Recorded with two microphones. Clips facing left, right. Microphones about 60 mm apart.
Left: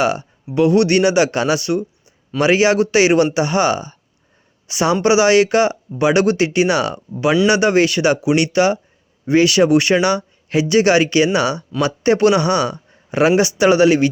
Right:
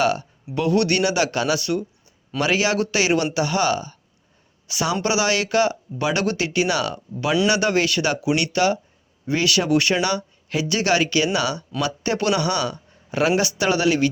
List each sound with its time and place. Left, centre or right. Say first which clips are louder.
0.0 s speech: left 3 dB; centre